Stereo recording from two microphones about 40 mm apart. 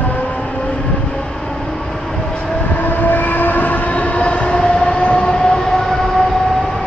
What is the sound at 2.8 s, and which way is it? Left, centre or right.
Train, left.